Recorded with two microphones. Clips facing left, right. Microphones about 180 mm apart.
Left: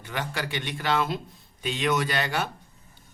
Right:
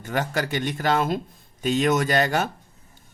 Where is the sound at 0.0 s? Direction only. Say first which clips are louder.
Right 6 dB; 45° right (ahead or behind).